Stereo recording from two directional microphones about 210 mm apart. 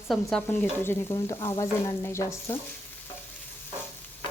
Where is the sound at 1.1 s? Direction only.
20° left (ahead or behind).